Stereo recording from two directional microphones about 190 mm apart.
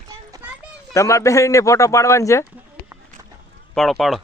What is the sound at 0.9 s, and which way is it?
Speech, 15° left (ahead or behind).